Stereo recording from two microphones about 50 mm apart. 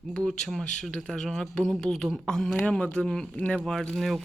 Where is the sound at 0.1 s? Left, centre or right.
Centre.